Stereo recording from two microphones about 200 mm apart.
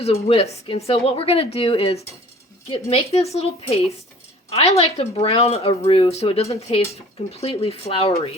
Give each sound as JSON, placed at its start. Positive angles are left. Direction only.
{"t": 0.0, "sound": "a woman's voice", "side_deg": 30}